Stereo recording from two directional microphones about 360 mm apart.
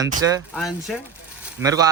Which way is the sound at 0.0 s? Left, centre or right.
Centre.